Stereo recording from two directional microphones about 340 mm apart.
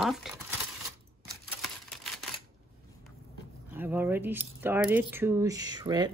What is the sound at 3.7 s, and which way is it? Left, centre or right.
Speech, centre.